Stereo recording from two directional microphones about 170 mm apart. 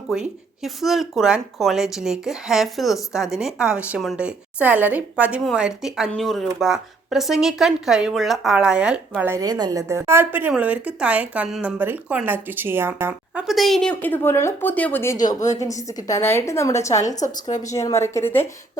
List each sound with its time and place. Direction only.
0.1 s a woman's voice: centre (ahead or behind); by 17.2 s 15° left (ahead or behind)
17.2 s a woman's voice: 45° left (ahead or behind)
17.7 s a woman's voice: 20° left (ahead or behind)